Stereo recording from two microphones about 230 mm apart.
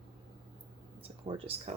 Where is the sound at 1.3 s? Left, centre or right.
Right.